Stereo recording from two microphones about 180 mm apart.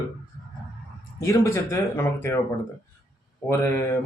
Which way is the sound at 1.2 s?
15° left (ahead or behind).